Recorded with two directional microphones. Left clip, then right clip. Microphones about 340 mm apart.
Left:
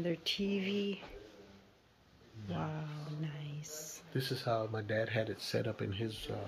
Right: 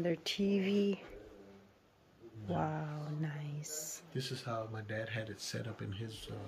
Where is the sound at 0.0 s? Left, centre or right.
Centre.